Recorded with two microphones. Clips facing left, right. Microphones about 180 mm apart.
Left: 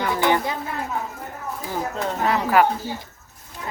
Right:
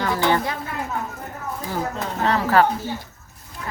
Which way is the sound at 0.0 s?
15° left (ahead or behind).